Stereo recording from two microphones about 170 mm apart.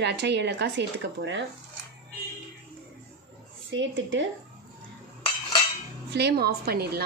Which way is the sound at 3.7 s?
90° right.